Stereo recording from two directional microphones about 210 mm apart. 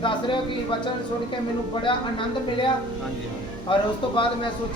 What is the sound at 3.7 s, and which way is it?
Speech, 25° left (ahead or behind).